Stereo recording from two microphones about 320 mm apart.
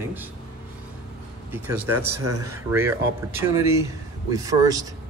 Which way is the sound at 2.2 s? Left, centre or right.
Right.